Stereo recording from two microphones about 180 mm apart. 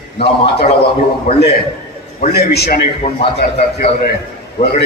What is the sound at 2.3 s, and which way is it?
Speech, 60° left (ahead or behind).